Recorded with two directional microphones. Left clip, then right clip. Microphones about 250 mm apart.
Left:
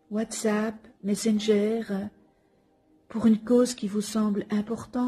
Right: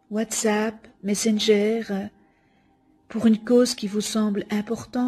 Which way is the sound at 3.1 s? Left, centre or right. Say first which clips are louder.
Right 3 dB; right.